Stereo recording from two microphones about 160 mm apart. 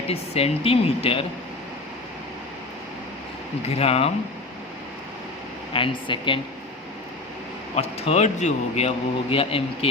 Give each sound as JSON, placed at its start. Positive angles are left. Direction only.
{"t": 0.1, "sound": "speech", "side_deg": 40}
{"t": 3.7, "sound": "speech", "side_deg": 40}
{"t": 5.7, "sound": "speech", "side_deg": 30}
{"t": 7.8, "sound": "speech", "side_deg": 40}